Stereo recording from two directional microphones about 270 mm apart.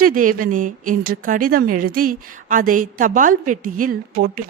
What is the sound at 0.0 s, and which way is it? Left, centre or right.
A woman's voice, right.